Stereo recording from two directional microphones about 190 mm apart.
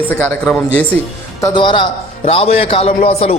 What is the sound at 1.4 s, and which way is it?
A man's voice, 25° left (ahead or behind).